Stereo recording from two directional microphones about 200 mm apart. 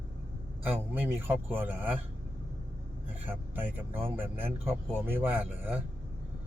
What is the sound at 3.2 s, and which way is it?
Speech, 10° right (ahead or behind).